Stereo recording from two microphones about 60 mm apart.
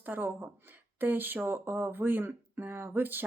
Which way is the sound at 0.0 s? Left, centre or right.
Right.